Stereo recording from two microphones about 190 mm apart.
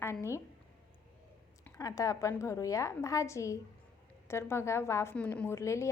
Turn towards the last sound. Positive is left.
turn(degrees=15)  # may be behind; listen again after turning